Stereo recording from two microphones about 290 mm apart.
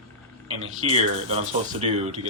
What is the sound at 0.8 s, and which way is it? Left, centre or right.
Speech, right.